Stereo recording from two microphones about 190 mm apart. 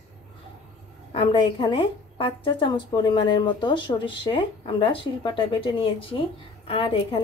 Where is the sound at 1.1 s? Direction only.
25° left (ahead or behind).